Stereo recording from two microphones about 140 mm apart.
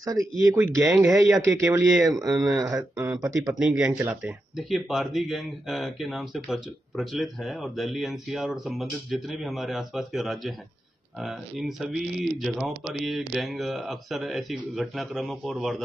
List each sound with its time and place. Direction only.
0.0 s a man's voice: 25° right (ahead or behind)
3.5 s speech: 5° right (ahead or behind)